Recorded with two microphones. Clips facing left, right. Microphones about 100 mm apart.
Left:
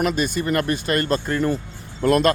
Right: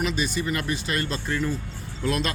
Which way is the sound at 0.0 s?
50° left (ahead or behind).